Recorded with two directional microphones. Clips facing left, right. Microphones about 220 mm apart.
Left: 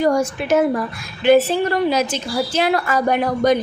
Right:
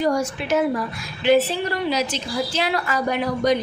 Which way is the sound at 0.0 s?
50° left (ahead or behind).